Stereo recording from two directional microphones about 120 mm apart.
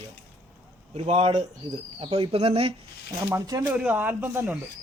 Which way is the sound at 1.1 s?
60° right (ahead or behind).